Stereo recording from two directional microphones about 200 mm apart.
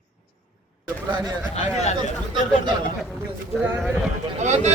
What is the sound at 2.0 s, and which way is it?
Speech, 25° right (ahead or behind).